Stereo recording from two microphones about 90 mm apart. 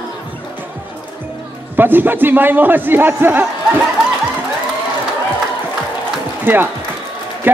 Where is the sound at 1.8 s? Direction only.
20° right (ahead or behind).